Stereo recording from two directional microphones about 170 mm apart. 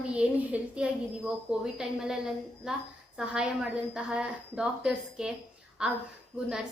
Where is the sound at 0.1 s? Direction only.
5° right (ahead or behind).